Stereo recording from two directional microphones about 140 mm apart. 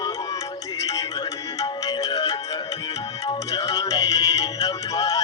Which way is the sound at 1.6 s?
25° left (ahead or behind).